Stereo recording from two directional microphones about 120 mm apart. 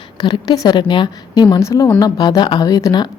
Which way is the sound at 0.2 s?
35° left (ahead or behind).